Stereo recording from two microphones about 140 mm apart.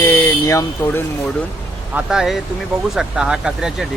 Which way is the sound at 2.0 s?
5° right (ahead or behind).